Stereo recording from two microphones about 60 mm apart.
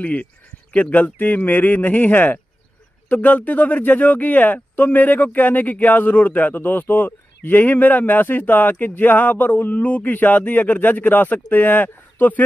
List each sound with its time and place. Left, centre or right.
0.0 s speech: left